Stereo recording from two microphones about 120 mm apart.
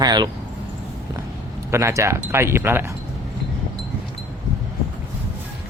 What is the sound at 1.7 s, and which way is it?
Speech, 25° right (ahead or behind).